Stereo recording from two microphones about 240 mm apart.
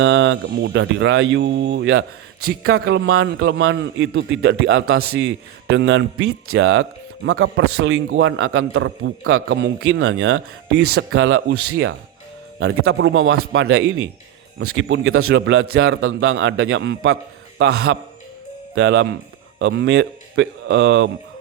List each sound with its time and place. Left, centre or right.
0.0 s a man's voice: right
15.3 s a man's voice: right
17.6 s a man's voice: right
18.7 s a man's voice: right